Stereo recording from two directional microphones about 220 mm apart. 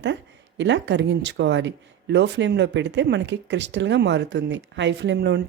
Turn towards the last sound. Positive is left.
turn(degrees=-50)  # may be behind; listen again after turning